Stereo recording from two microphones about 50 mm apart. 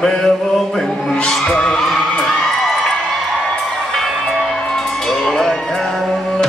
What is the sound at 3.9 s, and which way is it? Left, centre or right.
Music, centre.